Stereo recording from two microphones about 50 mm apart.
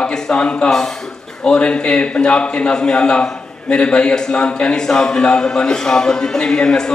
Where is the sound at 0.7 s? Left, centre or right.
Centre.